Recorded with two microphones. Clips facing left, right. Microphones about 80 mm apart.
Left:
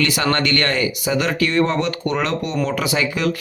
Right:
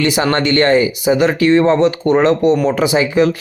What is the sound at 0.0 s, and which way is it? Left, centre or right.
Speech, right.